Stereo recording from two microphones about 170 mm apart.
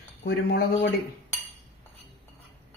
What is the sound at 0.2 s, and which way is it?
Speech, 85° left.